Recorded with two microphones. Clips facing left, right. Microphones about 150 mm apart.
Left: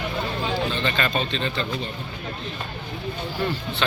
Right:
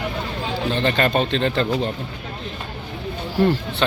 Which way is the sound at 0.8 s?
55° right (ahead or behind).